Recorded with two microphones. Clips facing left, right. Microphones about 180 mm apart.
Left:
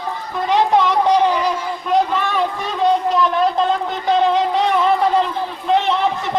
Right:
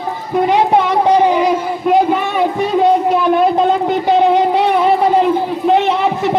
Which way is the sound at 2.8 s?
5° right (ahead or behind).